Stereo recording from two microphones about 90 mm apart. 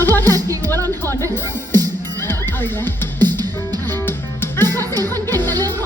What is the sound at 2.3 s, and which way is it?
Neigh, 25° left (ahead or behind).